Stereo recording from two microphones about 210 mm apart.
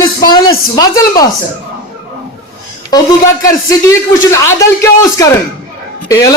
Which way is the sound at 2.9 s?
20° left (ahead or behind).